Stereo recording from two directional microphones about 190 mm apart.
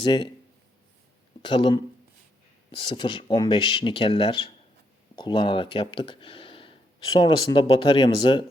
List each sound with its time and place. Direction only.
1.4 s speech: 25° left (ahead or behind)